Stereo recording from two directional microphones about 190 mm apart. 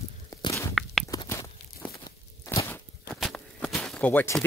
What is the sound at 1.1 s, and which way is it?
Crunch, 20° left (ahead or behind).